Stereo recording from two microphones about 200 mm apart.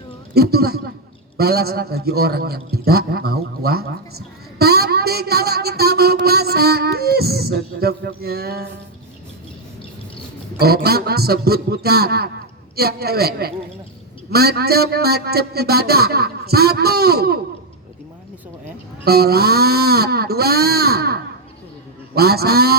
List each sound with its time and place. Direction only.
0.3 s a man's voice: 50° right (ahead or behind)
4.5 s a sound: 50° right (ahead or behind)
10.6 s a man's voice: 50° right (ahead or behind)
19.0 s a man's voice: 50° right (ahead or behind)